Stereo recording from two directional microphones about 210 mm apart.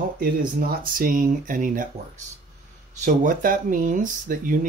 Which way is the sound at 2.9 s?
35° right (ahead or behind).